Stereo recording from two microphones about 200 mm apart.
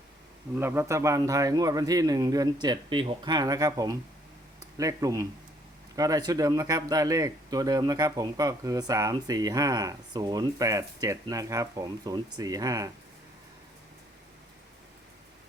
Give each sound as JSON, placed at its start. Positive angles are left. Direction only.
{"t": 0.5, "sound": "speech", "side_deg": -10}